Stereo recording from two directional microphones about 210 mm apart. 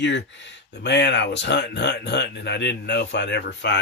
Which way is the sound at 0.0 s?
60° left (ahead or behind).